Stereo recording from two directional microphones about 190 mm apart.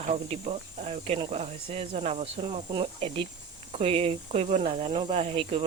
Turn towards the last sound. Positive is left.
turn(degrees=-30)  # may be behind; listen again after turning